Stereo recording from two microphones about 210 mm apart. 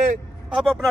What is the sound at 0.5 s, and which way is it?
Speech, centre (ahead or behind).